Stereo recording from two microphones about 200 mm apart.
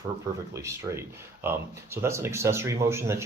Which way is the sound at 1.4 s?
10° right (ahead or behind).